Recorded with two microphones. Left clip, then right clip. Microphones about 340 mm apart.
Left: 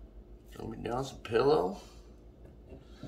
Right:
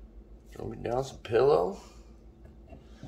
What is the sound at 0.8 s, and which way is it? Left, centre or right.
Speech, right.